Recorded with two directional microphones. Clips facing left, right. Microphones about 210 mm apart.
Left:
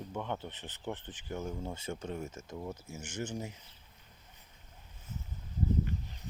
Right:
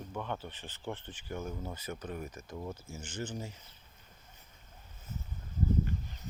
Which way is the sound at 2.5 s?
5° left (ahead or behind).